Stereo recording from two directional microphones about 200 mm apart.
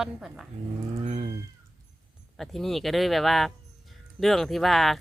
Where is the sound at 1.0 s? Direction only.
35° right (ahead or behind).